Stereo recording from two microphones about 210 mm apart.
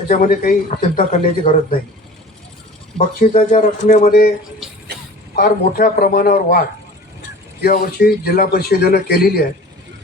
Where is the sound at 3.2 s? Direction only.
40° left (ahead or behind).